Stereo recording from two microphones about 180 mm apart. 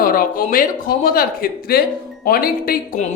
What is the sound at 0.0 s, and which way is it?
Speech, 50° left (ahead or behind).